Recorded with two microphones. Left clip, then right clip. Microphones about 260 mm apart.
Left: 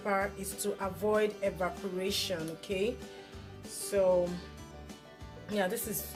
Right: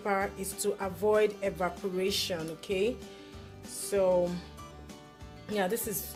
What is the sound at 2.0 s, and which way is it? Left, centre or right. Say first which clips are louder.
Music: right 2 dB; right.